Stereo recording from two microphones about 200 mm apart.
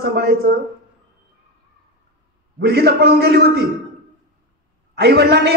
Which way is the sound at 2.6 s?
55° right (ahead or behind).